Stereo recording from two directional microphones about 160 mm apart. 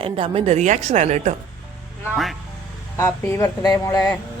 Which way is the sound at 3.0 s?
15° left (ahead or behind).